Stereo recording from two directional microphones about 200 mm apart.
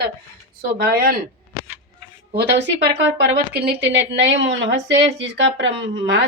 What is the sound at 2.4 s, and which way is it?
Speech, 60° right (ahead or behind).